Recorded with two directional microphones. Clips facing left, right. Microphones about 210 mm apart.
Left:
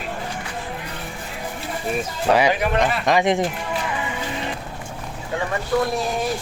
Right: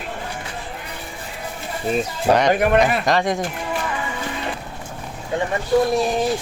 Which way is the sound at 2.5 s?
55° right (ahead or behind).